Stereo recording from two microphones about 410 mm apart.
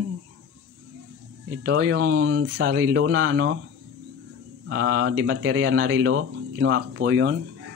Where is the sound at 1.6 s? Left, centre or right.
Right.